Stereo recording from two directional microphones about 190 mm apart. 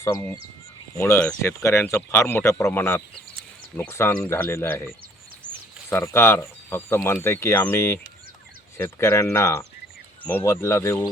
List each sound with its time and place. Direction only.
0.0 s speech: 15° left (ahead or behind)
5.9 s speech: 15° left (ahead or behind)